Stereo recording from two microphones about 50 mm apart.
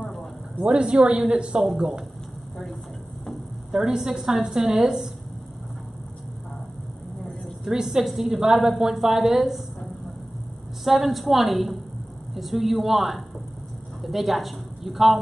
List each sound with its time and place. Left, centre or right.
0.0 s a sound: centre
0.7 s a woman's voice: centre
3.7 s a woman's voice: centre
7.7 s a woman's voice: centre
10.8 s a woman's voice: centre